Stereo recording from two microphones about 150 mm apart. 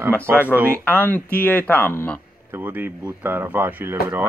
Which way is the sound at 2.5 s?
10° right (ahead or behind).